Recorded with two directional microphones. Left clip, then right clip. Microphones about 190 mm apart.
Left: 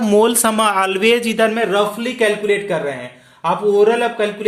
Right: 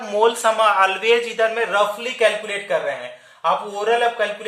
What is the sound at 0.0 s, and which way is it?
Speech, 55° left (ahead or behind).